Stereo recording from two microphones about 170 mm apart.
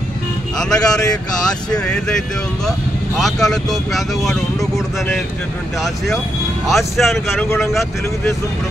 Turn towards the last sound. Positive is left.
turn(degrees=15)  # may be behind; listen again after turning